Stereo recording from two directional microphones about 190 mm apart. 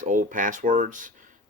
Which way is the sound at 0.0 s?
40° right (ahead or behind).